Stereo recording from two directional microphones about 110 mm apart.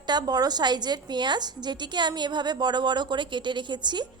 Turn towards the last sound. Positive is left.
turn(degrees=-45)  # may be behind; listen again after turning